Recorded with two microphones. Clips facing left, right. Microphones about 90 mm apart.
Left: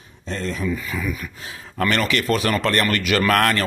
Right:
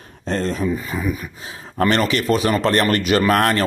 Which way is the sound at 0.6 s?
30° right (ahead or behind).